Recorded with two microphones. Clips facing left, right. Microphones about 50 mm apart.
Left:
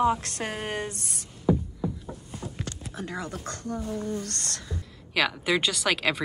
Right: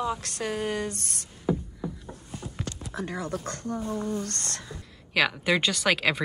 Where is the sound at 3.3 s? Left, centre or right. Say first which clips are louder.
Right 2 dB; right.